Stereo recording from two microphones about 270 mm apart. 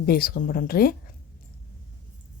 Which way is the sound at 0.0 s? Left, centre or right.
Left.